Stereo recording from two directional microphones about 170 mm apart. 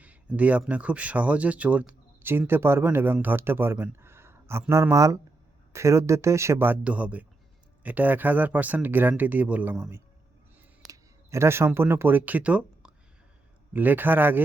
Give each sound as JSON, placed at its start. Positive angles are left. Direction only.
{"t": 0.0, "sound": "speech", "side_deg": -10}
{"t": 10.8, "sound": "speech", "side_deg": -20}